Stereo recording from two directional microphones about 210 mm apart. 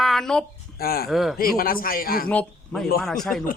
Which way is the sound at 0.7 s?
45° left (ahead or behind).